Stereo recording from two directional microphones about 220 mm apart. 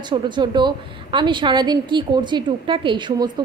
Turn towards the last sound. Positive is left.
turn(degrees=-20)  # may be behind; listen again after turning